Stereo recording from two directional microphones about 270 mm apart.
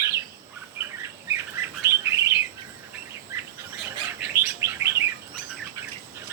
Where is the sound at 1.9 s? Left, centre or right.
Centre.